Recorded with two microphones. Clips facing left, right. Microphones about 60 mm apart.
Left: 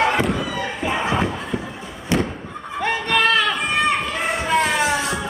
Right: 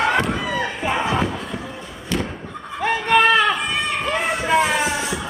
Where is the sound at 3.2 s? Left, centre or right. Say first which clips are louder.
Right 3 dB; centre.